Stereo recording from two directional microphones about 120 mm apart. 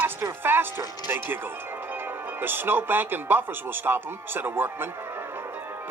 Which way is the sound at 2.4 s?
15° right (ahead or behind).